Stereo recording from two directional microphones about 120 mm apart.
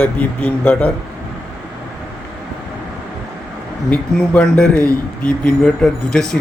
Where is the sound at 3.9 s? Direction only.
10° left (ahead or behind).